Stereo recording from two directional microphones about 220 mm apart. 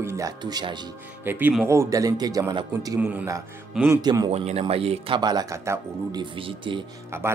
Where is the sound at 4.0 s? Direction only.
20° right (ahead or behind).